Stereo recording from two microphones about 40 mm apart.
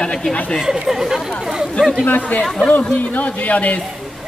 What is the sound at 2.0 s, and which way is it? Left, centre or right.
Speech, left.